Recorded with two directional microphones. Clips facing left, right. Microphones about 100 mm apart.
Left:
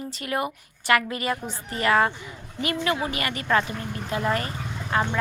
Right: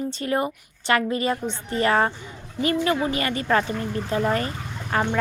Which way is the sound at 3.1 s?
30° right (ahead or behind).